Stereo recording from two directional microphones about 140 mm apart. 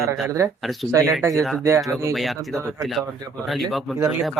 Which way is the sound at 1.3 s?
Centre (ahead or behind).